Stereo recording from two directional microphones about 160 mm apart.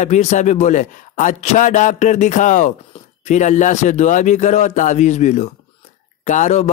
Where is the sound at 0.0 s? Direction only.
50° left (ahead or behind).